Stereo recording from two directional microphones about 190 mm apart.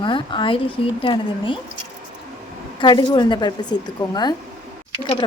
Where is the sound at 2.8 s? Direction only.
25° left (ahead or behind).